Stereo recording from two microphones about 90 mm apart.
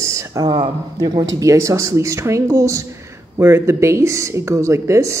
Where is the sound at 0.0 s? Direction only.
35° right (ahead or behind).